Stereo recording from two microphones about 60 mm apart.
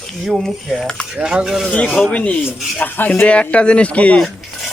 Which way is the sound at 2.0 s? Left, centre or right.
Left.